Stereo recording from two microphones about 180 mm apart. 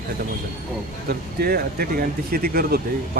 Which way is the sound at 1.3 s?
60° right (ahead or behind).